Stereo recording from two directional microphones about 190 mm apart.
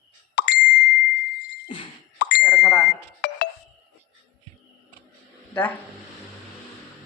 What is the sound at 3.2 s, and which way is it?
Music, 65° left (ahead or behind).